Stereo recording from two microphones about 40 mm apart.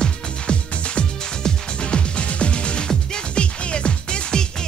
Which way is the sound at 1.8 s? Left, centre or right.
Left.